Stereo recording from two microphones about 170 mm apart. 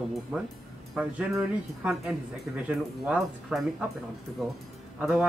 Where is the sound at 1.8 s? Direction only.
5° right (ahead or behind).